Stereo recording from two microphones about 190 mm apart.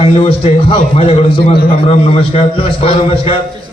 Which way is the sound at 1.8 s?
30° left (ahead or behind).